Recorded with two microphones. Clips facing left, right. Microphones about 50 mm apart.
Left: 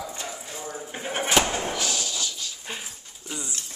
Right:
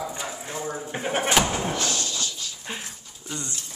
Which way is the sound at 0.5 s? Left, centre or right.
Right.